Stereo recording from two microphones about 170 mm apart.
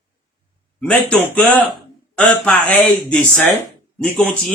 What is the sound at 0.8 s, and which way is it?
A man's voice, 5° left (ahead or behind).